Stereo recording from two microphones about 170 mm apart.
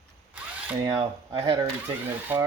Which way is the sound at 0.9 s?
30° right (ahead or behind).